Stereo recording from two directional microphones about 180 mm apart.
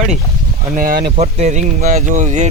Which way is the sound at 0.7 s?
55° right (ahead or behind).